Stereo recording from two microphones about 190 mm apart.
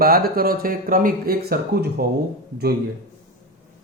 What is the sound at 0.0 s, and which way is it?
Speech, 50° right (ahead or behind).